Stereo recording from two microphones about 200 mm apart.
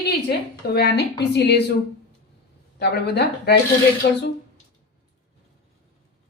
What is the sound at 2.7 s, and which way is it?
A woman's voice, 55° left (ahead or behind).